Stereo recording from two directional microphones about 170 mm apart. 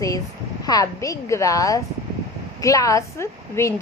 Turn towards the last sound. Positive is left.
turn(degrees=15)  # may be behind; listen again after turning